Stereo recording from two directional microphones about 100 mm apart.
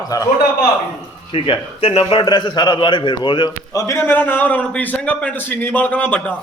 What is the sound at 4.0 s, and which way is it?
A man's voice, 20° left (ahead or behind).